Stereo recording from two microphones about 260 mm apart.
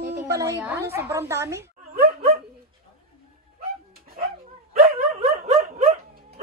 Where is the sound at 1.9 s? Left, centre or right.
Right.